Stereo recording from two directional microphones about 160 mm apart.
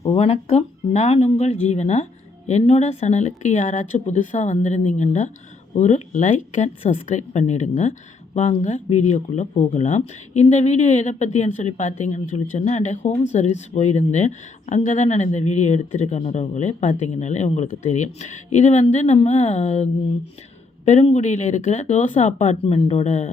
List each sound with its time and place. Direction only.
0.0 s speech: 40° left (ahead or behind)